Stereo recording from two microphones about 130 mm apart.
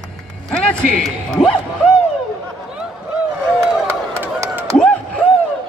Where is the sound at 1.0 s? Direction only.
Centre (ahead or behind).